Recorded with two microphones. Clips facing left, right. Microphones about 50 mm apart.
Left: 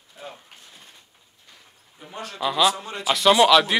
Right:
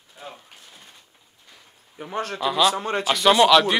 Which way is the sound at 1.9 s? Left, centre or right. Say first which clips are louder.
Right 5 dB; right.